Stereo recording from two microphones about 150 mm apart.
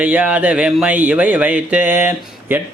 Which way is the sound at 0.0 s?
10° right (ahead or behind).